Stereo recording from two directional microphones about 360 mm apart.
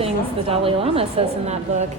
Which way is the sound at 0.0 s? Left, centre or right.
Centre.